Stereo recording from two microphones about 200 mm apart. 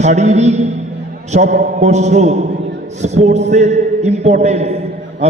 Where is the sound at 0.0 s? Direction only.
35° right (ahead or behind).